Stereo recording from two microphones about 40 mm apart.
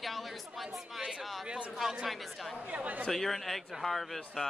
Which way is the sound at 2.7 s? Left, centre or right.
Right.